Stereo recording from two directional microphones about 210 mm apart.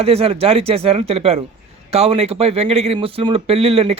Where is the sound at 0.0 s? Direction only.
30° right (ahead or behind).